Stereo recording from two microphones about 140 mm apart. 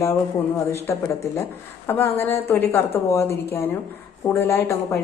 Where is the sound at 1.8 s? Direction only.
15° left (ahead or behind).